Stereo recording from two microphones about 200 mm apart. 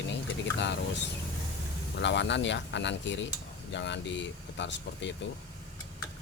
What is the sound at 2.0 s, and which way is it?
Speech, 65° left (ahead or behind).